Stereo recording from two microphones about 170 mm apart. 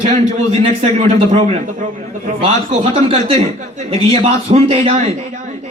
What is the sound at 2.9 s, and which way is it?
A man's voice, 35° right (ahead or behind).